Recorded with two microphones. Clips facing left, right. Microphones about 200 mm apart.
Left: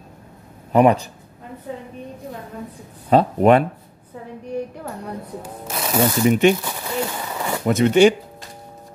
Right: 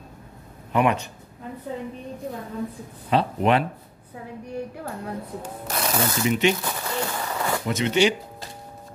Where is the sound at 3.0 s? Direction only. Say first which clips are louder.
Left 7 dB; 45° left (ahead or behind).